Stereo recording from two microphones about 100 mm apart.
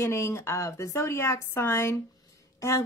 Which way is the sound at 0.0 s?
25° left (ahead or behind).